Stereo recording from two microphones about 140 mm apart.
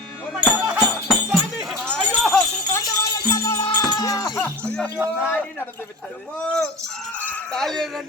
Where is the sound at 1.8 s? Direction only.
5° left (ahead or behind).